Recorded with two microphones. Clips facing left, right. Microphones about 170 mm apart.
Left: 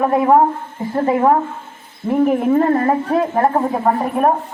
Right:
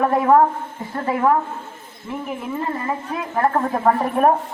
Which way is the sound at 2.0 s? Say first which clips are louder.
Left 13 dB; 50° left (ahead or behind).